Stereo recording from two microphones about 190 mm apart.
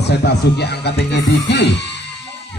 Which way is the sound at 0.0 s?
60° left (ahead or behind).